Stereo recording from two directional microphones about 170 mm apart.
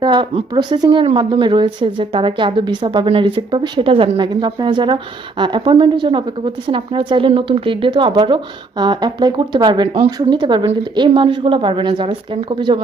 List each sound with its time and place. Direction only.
0.0 s a woman's voice: 30° right (ahead or behind)